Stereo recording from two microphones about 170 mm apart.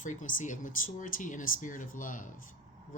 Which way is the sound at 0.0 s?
50° left (ahead or behind).